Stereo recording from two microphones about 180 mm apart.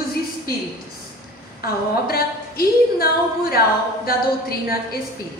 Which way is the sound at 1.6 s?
55° left (ahead or behind).